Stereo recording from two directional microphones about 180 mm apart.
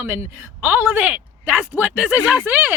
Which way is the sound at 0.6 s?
10° right (ahead or behind).